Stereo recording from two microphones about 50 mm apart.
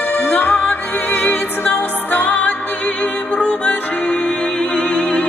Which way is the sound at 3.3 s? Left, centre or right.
Centre.